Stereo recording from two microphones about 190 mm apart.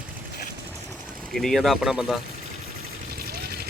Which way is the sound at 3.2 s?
50° right (ahead or behind).